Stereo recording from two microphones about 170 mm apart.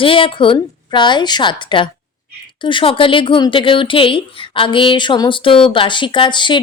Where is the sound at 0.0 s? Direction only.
30° left (ahead or behind).